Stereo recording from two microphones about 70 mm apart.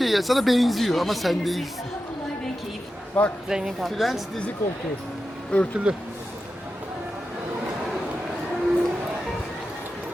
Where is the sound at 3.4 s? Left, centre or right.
Centre.